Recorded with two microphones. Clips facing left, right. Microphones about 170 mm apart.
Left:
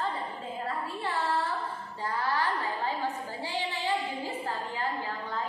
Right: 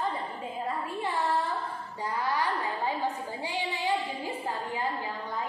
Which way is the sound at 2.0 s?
15° right (ahead or behind).